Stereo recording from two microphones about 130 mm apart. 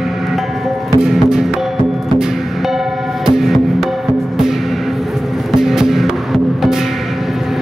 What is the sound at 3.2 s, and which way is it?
Music, centre (ahead or behind).